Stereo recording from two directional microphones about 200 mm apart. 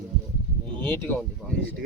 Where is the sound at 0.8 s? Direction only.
10° left (ahead or behind).